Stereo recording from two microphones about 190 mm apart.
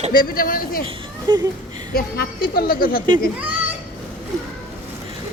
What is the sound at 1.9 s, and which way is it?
A woman's voice, 50° left (ahead or behind).